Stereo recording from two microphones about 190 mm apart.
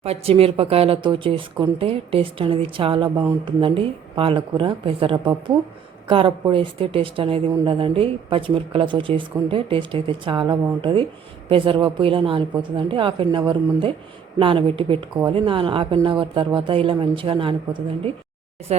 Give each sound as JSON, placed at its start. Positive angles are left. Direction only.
{"t": 0.0, "sound": "speech", "side_deg": -30}